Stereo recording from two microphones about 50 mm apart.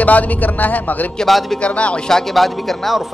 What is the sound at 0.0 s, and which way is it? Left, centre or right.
Speech, left.